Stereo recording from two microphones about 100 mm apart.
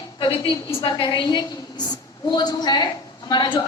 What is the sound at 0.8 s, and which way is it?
A woman's voice, 55° left (ahead or behind).